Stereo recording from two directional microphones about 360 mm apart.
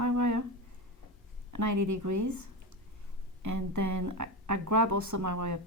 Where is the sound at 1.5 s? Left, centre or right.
Right.